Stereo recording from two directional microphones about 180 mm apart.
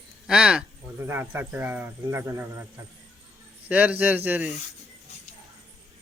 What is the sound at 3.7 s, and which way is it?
Speech, 10° right (ahead or behind).